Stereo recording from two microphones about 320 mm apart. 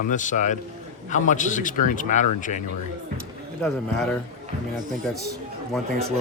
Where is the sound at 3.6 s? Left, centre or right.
Centre.